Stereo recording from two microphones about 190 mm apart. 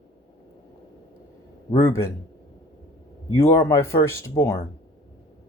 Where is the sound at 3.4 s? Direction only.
15° left (ahead or behind).